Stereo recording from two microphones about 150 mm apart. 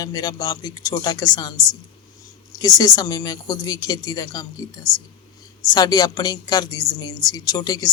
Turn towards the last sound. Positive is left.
turn(degrees=25)  # may be behind; listen again after turning